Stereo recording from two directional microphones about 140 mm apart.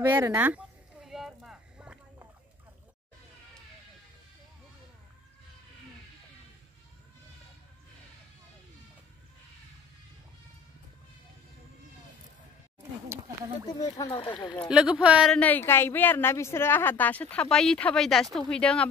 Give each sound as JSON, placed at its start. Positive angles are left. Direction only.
{"t": 0.0, "sound": "speech", "side_deg": -30}
{"t": 0.3, "sound": "a sound", "side_deg": -15}
{"t": 13.7, "sound": "speech", "side_deg": 25}
{"t": 14.7, "sound": "speech", "side_deg": -5}
{"t": 15.3, "sound": "a woman's voice", "side_deg": 10}